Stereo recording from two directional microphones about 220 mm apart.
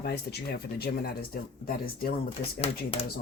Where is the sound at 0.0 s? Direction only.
50° left (ahead or behind).